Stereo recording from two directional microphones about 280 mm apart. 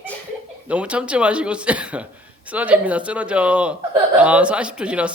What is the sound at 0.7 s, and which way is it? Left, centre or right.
A man's voice, centre.